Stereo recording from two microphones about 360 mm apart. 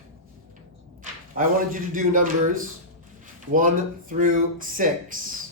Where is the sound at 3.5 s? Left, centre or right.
Right.